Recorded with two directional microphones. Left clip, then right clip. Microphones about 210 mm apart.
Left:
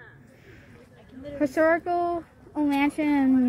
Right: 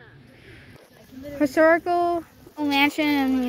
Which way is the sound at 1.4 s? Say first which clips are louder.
Right 4 dB; 15° right (ahead or behind).